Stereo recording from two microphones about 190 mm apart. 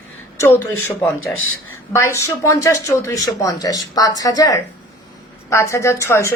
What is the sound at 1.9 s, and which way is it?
Speech, 15° left (ahead or behind).